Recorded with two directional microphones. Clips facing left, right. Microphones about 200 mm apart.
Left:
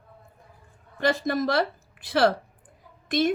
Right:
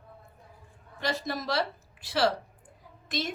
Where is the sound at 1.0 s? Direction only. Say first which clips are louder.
Left 8 dB; 50° left (ahead or behind).